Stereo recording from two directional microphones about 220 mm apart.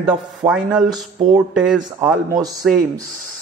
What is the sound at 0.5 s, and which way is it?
A man's voice, 5° right (ahead or behind).